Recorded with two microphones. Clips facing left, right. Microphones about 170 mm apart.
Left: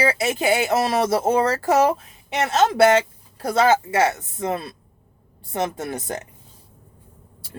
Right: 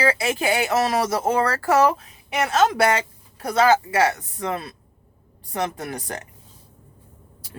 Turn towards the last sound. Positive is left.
turn(degrees=25)  # may be behind; listen again after turning